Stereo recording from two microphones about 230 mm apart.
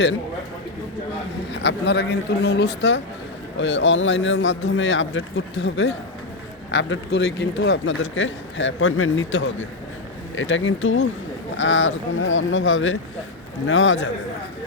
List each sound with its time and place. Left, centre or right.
1.5 s a man's voice: left